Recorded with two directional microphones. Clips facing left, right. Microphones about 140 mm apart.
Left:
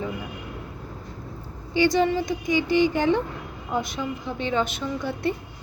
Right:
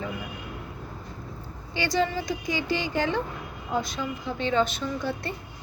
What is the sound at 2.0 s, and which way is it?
A woman's voice, 20° left (ahead or behind).